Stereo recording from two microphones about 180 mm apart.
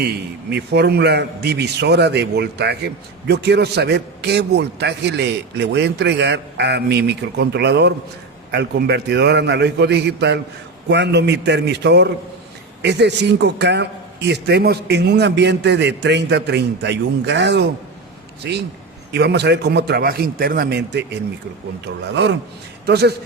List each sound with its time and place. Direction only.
0.5 s a man's voice: 65° right (ahead or behind)
22.9 s a man's voice: 65° right (ahead or behind)